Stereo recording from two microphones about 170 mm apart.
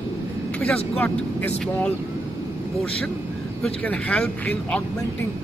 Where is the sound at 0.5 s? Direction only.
10° left (ahead or behind).